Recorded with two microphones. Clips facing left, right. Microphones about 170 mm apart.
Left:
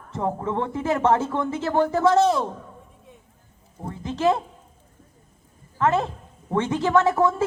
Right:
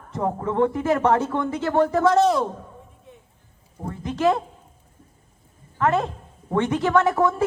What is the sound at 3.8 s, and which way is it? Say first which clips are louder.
Speech: right 1 dB; 20° left (ahead or behind).